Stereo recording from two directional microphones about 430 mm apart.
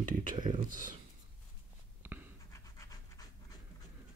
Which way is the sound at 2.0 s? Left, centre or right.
Centre.